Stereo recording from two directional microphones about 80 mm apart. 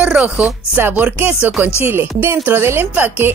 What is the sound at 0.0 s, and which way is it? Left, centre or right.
Speech, centre.